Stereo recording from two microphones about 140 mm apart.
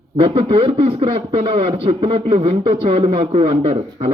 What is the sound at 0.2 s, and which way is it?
A man's voice, 40° right (ahead or behind).